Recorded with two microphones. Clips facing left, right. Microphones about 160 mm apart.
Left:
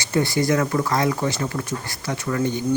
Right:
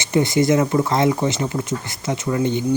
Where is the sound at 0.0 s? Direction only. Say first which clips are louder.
Right 4 dB; 20° right (ahead or behind).